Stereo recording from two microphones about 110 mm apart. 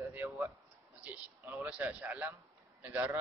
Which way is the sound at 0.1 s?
20° right (ahead or behind).